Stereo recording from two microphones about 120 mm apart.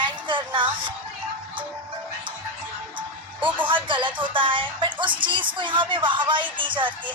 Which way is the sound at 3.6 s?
45° right (ahead or behind).